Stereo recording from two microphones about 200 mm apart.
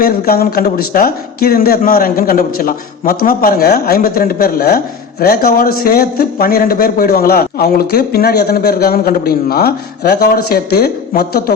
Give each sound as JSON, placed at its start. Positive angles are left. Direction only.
{"t": 0.0, "sound": "speech", "side_deg": 50}